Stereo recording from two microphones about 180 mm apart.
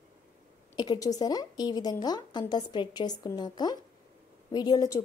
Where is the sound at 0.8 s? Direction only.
20° left (ahead or behind).